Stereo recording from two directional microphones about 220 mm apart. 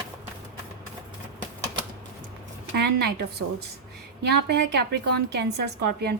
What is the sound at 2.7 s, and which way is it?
A woman's voice, 50° right (ahead or behind).